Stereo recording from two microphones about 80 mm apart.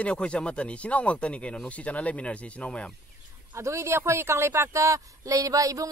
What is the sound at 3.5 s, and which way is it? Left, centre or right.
Speech, right.